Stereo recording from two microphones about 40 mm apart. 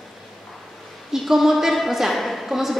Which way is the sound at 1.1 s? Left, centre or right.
Centre.